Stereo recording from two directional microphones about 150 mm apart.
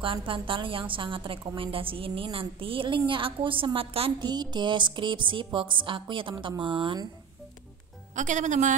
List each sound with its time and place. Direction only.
0.0 s a woman's voice: 35° right (ahead or behind)
4.3 s a woman's voice: 30° right (ahead or behind)
8.2 s speech: 55° right (ahead or behind)